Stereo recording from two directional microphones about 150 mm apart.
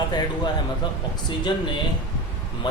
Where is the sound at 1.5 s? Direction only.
30° left (ahead or behind).